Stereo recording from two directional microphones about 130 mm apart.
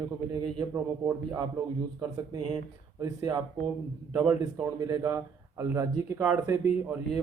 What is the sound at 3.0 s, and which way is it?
Speech, 30° right (ahead or behind).